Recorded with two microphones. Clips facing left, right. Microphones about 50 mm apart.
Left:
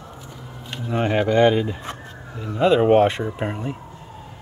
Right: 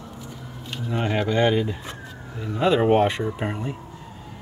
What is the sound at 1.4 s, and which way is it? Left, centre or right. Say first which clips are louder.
Speech: left 3 dB; centre.